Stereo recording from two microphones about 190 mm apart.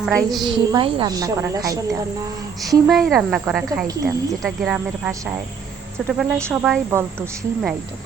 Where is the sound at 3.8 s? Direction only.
20° right (ahead or behind).